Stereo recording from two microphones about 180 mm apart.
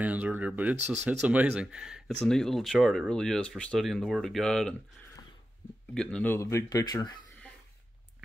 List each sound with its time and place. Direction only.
0.0 s speech: 10° right (ahead or behind)
5.9 s speech: 5° left (ahead or behind); by 7.2 s 20° left (ahead or behind)